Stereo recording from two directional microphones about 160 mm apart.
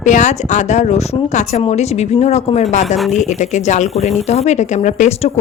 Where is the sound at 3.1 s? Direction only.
50° left (ahead or behind).